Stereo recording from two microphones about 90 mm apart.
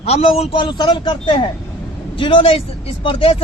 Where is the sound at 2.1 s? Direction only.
80° left.